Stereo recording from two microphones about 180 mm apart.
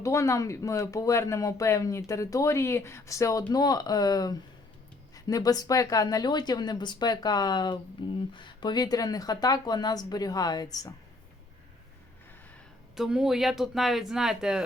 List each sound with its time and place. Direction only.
0.0 s speech: 15° left (ahead or behind)
13.0 s speech: 5° right (ahead or behind)